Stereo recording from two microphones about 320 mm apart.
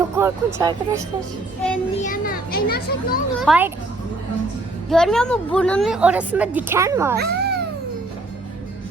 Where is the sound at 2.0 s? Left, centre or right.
Left.